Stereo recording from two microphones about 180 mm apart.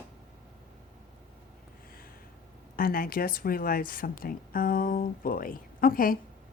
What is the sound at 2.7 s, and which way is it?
Speech, 55° left (ahead or behind).